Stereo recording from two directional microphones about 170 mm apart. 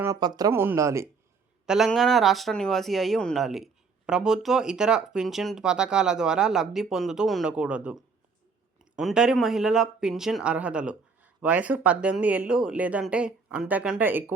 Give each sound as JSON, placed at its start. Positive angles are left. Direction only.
{"t": 0.0, "sound": "speech", "side_deg": -20}
{"t": 1.6, "sound": "speech", "side_deg": -5}